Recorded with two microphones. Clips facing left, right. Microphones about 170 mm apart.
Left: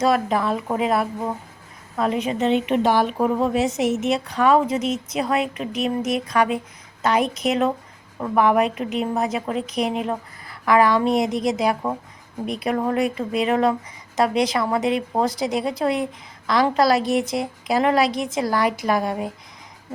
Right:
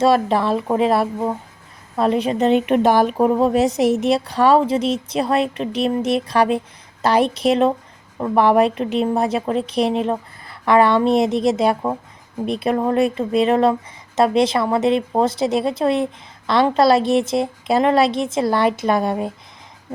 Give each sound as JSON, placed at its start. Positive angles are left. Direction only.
{"t": 0.0, "sound": "a woman's voice", "side_deg": -30}